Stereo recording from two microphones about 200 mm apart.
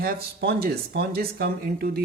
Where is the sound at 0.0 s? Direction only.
50° right (ahead or behind).